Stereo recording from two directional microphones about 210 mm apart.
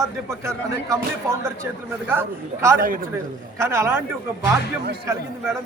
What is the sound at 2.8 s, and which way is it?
Speech, 40° right (ahead or behind).